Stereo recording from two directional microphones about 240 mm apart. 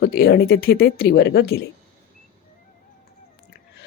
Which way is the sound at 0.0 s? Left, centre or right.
Left.